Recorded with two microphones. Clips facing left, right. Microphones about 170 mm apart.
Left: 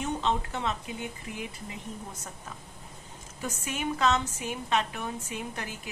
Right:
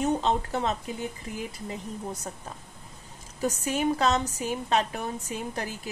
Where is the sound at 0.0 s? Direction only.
40° right (ahead or behind).